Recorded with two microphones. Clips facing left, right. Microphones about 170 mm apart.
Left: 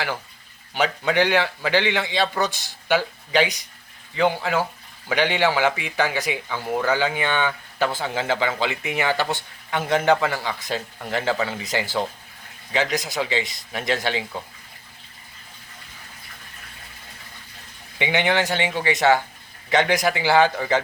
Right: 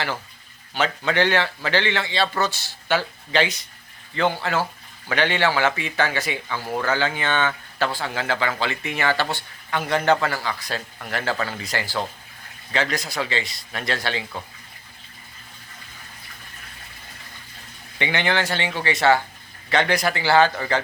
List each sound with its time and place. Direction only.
0.7 s speech: 15° left (ahead or behind)
18.0 s speech: 15° left (ahead or behind)